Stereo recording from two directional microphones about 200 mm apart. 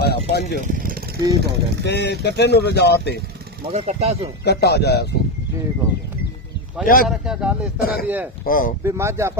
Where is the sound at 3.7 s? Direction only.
30° right (ahead or behind).